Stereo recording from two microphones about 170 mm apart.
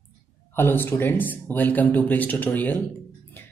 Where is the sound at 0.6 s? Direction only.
10° left (ahead or behind).